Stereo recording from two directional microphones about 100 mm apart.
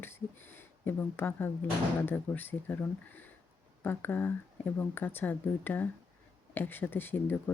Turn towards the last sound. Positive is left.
turn(degrees=20)  # may be behind; listen again after turning